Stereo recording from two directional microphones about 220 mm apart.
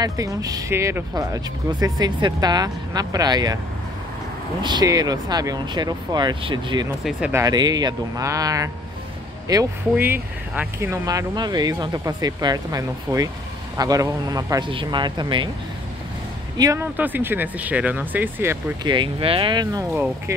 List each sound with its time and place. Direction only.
0.0 s speech: 15° right (ahead or behind)
4.6 s speech: 20° right (ahead or behind)
7.1 s speech: 5° right (ahead or behind)
7.4 s speech: 20° right (ahead or behind)
16.5 s speech: 15° right (ahead or behind)
18.9 s speech: 20° right (ahead or behind)
19.9 s speech: 10° right (ahead or behind)